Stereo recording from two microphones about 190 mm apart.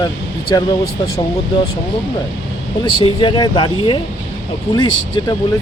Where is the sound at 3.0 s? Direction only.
25° left (ahead or behind).